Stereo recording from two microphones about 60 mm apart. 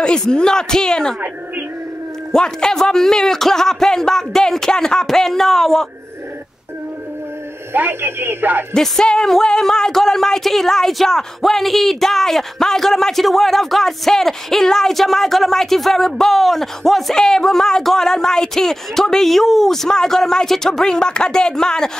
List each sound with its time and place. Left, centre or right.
0.0 s speech: centre
2.3 s speech: centre
7.7 s speech: right
8.7 s speech: centre